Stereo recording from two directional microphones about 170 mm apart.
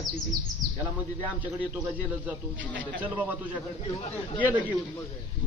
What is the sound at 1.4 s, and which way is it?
Speech, 10° right (ahead or behind).